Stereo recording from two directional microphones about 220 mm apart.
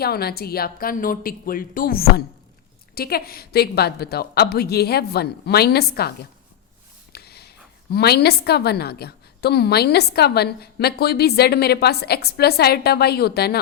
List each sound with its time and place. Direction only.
0.0 s a woman's voice: 45° left (ahead or behind)